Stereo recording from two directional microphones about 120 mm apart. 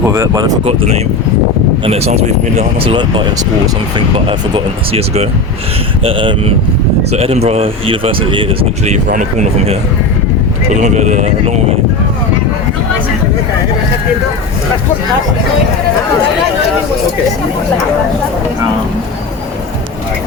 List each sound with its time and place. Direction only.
0.0 s speech: 20° right (ahead or behind)
0.6 s speech: 55° right (ahead or behind)
2.9 s speech: 40° right (ahead or behind)
4.3 s speech: 50° right (ahead or behind)
8.8 s speech: 80° right
10.8 s speech: 80° right